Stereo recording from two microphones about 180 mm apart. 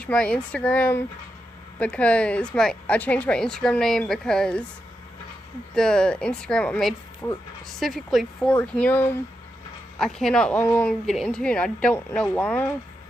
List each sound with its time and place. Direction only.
0.0 s speech: 5° left (ahead or behind)
5.8 s speech: 5° left (ahead or behind)
7.2 s speech: 15° left (ahead or behind)
7.8 s speech: centre (ahead or behind)